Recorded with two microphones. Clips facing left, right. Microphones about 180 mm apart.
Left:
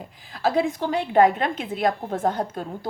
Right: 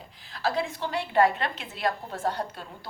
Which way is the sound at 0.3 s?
45° left (ahead or behind).